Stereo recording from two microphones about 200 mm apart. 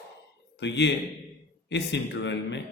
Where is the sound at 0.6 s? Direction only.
60° left (ahead or behind).